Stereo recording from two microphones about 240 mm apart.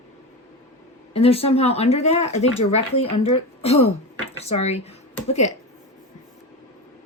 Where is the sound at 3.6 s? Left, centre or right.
Left.